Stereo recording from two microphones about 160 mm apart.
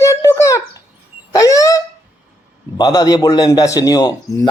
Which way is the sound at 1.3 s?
20° left (ahead or behind).